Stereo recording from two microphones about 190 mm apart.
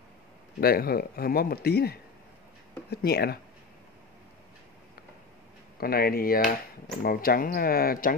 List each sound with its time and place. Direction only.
0.6 s speech: 55° left (ahead or behind)
5.8 s speech: 55° left (ahead or behind)